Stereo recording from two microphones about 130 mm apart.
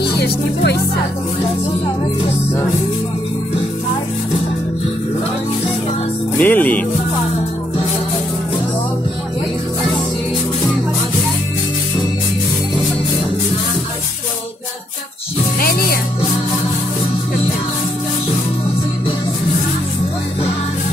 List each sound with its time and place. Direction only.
6.3 s music: 15° left (ahead or behind)